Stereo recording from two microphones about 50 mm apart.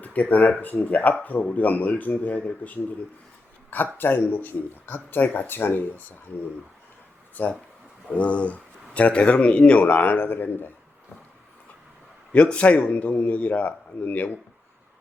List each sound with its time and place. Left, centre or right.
0.0 s speech: left
3.9 s speech: left
7.4 s a man's voice: left
9.8 s speech: left
12.3 s a man's voice: left